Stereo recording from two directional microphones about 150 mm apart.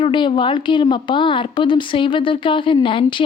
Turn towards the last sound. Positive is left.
turn(degrees=35)  # may be behind; listen again after turning